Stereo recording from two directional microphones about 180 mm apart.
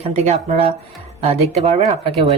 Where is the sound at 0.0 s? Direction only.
35° right (ahead or behind).